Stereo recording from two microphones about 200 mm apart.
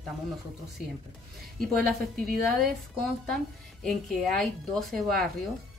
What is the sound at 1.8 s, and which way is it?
Speech, 50° right (ahead or behind).